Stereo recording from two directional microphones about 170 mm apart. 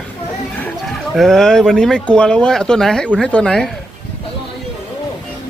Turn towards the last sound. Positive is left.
turn(degrees=5)  # may be behind; listen again after turning